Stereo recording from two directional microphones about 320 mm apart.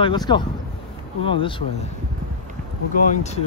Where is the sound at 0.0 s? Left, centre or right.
Centre.